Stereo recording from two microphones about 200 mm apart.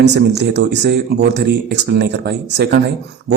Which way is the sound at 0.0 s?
55° right (ahead or behind).